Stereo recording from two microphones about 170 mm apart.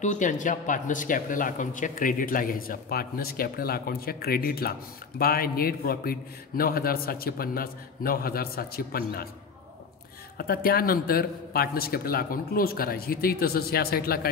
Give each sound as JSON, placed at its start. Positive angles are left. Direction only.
{"t": 0.0, "sound": "speech", "side_deg": 45}
{"t": 10.3, "sound": "speech", "side_deg": 60}